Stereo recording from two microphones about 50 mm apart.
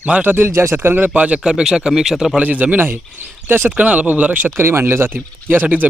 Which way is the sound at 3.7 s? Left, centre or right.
Right.